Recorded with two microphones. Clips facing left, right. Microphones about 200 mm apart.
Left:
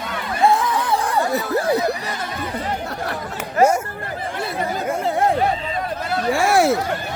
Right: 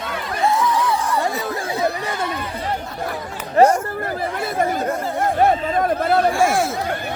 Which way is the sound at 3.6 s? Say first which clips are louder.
Right 2 dB; 35° right (ahead or behind).